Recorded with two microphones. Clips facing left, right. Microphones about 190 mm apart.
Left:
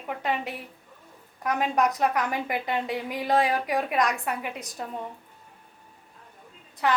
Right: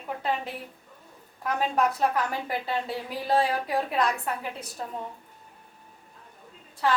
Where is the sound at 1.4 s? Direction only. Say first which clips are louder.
Left 1 dB; 15° left (ahead or behind).